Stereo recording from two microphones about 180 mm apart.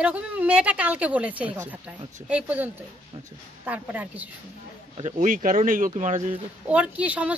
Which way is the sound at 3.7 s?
10° right (ahead or behind).